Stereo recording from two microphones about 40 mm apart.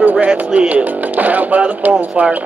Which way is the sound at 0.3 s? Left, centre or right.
Right.